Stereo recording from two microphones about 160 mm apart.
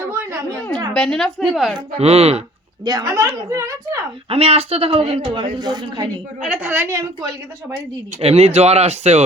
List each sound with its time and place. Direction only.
0.0 s a sound: 15° right (ahead or behind)
0.9 s a woman's voice: 5° left (ahead or behind)
2.0 s a man's voice: 40° right (ahead or behind)
2.8 s a woman's voice: 25° right (ahead or behind)
4.3 s a man's voice: 40° right (ahead or behind)
6.4 s a woman's voice: 10° right (ahead or behind)
8.2 s a man's voice: 40° right (ahead or behind)